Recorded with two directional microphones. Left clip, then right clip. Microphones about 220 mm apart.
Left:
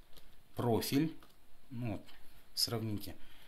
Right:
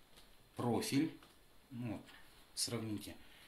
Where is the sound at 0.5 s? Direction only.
50° left (ahead or behind).